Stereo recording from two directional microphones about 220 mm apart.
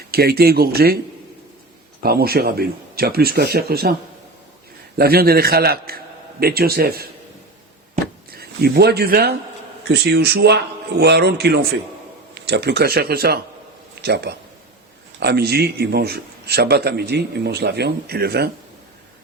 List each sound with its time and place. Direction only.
0.1 s speech: 45° right (ahead or behind)
2.0 s speech: 45° right (ahead or behind)
4.9 s speech: 45° right (ahead or behind)
8.3 s speech: 45° right (ahead or behind)